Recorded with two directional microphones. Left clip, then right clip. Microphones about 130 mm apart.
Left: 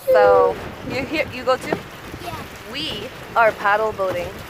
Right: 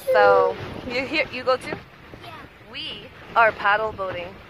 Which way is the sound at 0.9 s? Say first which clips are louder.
Left 1 dB; 25° right (ahead or behind).